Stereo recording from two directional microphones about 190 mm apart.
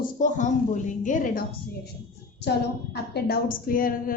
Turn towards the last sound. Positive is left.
turn(degrees=50)  # may be behind; listen again after turning